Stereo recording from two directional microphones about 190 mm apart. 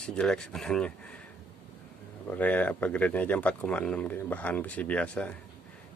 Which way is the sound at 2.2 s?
10° left (ahead or behind).